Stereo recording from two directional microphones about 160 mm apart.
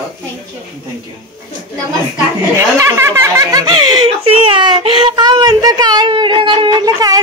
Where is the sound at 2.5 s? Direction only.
15° right (ahead or behind).